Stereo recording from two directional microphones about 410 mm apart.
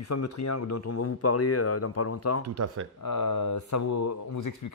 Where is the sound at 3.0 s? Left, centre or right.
Left.